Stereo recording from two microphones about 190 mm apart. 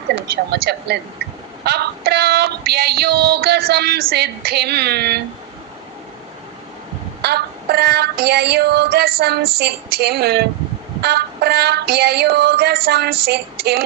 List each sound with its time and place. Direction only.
0.5 s female singing: 60° right (ahead or behind)
7.2 s female singing: 60° right (ahead or behind)